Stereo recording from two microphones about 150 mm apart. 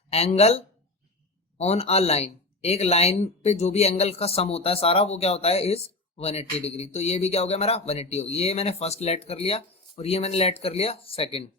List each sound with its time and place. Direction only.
0.1 s speech: 45° left (ahead or behind)